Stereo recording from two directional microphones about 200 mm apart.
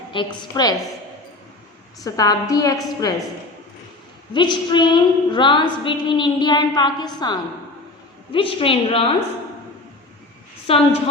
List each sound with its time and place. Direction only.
0.1 s a woman's voice: 25° left (ahead or behind)
2.0 s a woman's voice: 15° left (ahead or behind)
4.4 s a woman's voice: 25° left (ahead or behind)